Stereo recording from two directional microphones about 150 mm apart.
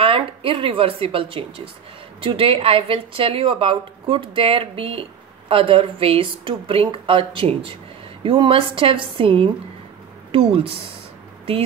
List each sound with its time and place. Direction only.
0.0 s a woman's voice: 35° right (ahead or behind)